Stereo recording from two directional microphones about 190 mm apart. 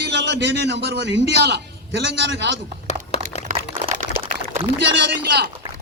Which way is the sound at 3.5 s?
30° right (ahead or behind).